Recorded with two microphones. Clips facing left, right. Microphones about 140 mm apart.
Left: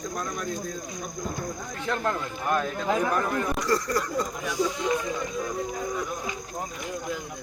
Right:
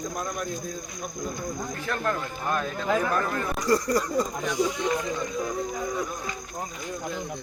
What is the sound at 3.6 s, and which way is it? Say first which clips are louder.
Speech: right 2 dB; 15° right (ahead or behind).